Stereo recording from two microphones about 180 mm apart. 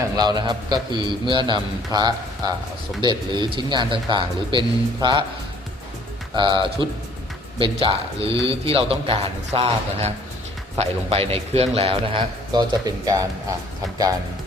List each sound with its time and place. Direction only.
0.2 s a man's voice: 25° right (ahead or behind)
6.3 s a man's voice: 25° right (ahead or behind)